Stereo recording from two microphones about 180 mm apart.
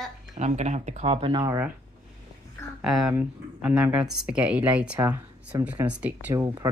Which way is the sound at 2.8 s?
Centre (ahead or behind).